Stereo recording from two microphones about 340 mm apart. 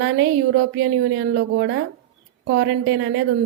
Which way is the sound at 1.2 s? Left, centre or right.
Right.